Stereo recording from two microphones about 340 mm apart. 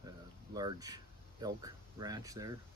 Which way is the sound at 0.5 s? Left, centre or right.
Centre.